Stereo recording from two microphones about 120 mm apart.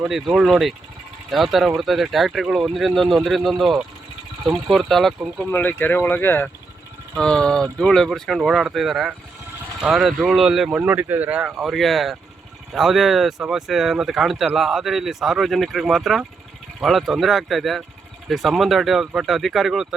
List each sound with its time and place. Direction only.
0.1 s speech: 5° right (ahead or behind)
5.5 s speech: 15° left (ahead or behind); by 10.8 s 5° right (ahead or behind)
10.8 s speech: 15° right (ahead or behind)